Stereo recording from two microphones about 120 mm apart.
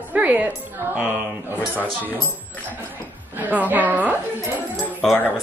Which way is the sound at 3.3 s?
15° right (ahead or behind).